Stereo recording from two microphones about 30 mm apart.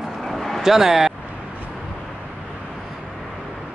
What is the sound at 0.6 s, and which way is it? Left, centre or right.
Speech, centre.